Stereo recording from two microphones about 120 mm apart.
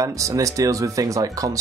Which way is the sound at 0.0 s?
25° right (ahead or behind).